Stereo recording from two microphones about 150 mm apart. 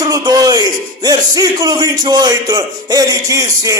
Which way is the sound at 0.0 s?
25° right (ahead or behind).